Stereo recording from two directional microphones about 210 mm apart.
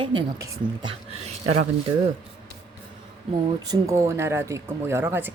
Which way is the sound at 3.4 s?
20° right (ahead or behind).